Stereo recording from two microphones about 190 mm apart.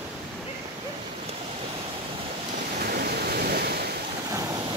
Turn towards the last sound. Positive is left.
turn(degrees=-55)  # may be behind; listen again after turning